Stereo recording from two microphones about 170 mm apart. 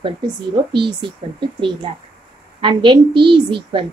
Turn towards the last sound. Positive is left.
turn(degrees=-30)  # may be behind; listen again after turning